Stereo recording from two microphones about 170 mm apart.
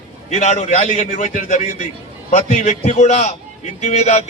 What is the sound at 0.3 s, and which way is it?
A man's voice, 45° left (ahead or behind).